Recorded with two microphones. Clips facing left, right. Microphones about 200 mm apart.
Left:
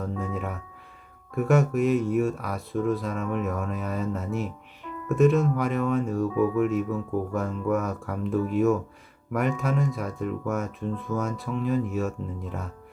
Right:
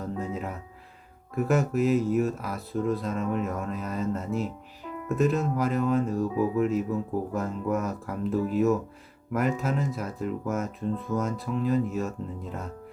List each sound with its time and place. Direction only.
0.0 s music: centre (ahead or behind)
1.4 s speech: centre (ahead or behind)
6.2 s speech: 25° right (ahead or behind)
7.3 s speech: centre (ahead or behind)